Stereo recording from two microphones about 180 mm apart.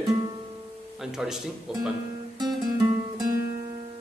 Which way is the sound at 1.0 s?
5° right (ahead or behind).